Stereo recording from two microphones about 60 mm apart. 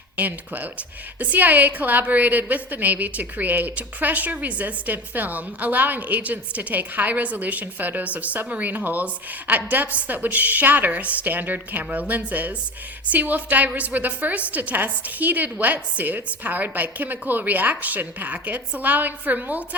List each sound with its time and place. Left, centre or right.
0.2 s a woman's voice: right